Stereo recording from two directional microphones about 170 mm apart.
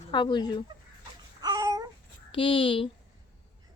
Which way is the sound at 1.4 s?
20° right (ahead or behind).